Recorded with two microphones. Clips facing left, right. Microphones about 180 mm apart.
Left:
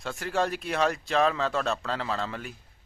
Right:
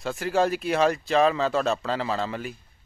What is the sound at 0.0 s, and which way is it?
Speech, centre (ahead or behind).